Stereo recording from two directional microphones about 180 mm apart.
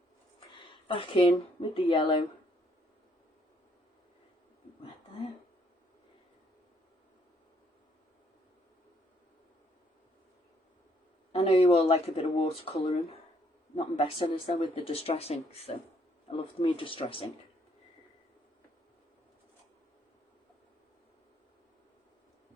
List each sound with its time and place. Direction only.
0.3 s a sound: 25° left (ahead or behind)
1.7 s speech: 30° left (ahead or behind)
11.3 s speech: 35° left (ahead or behind)